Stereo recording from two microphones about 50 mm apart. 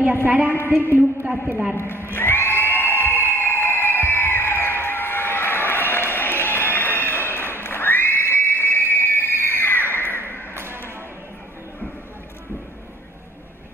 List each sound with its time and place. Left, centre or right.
0.0 s a woman's voice: right
1.8 s a sound: left
10.5 s music: right